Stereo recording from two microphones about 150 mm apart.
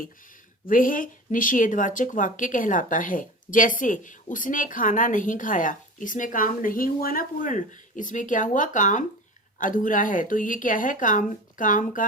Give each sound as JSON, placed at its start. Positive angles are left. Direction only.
{"t": 0.7, "sound": "speech", "side_deg": 65}